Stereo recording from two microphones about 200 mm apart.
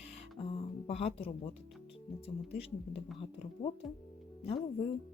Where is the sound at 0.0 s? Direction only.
30° left (ahead or behind).